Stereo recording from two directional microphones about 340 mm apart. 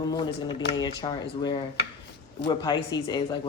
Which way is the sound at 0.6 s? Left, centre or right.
Left.